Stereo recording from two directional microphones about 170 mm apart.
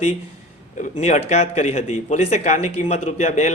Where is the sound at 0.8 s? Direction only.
45° left (ahead or behind).